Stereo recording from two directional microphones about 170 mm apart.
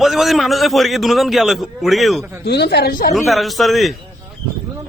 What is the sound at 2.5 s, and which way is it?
Speech, 70° left (ahead or behind).